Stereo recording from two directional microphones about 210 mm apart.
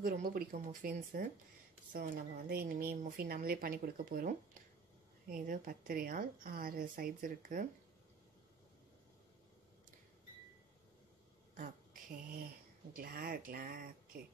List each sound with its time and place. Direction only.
0.0 s a woman's voice: 45° right (ahead or behind)
11.5 s a sound: 35° right (ahead or behind)
12.9 s a woman's voice: 45° right (ahead or behind)